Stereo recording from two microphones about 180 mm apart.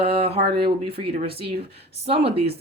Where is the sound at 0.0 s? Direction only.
35° right (ahead or behind).